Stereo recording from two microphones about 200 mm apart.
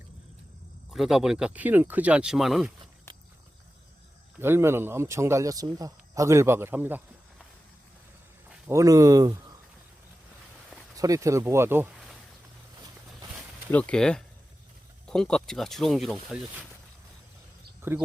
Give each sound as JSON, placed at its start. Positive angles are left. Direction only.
{"t": 0.9, "sound": "speech", "side_deg": 0}
{"t": 4.4, "sound": "speech", "side_deg": -10}
{"t": 8.4, "sound": "speech", "side_deg": -5}
{"t": 10.9, "sound": "speech", "side_deg": -15}
{"t": 13.7, "sound": "speech", "side_deg": 5}
{"t": 17.8, "sound": "speech", "side_deg": -10}